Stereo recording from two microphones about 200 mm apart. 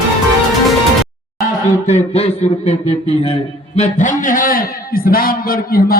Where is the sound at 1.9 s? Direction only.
30° left (ahead or behind).